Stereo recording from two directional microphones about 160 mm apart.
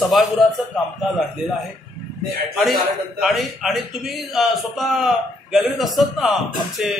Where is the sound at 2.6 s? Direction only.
Centre (ahead or behind).